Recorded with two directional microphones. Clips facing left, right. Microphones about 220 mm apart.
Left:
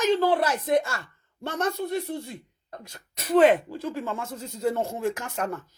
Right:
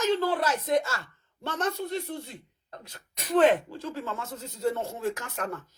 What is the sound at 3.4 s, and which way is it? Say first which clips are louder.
A woman's voice: left 2 dB; 10° left (ahead or behind).